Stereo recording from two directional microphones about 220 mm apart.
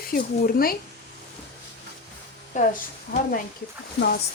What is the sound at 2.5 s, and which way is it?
Speech, 35° left (ahead or behind).